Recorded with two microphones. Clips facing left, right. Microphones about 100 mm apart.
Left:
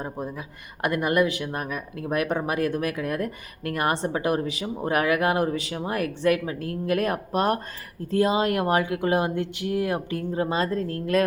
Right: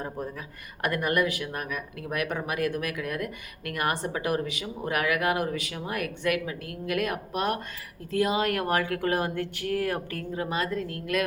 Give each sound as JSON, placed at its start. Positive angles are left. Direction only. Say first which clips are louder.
{"t": 0.0, "sound": "speech", "louder": "left 2 dB", "side_deg": 20}